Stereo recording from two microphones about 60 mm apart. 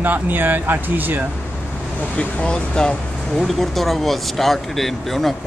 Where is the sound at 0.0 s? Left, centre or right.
Right.